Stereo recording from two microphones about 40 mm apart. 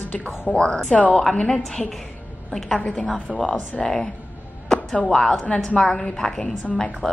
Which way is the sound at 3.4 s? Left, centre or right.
Left.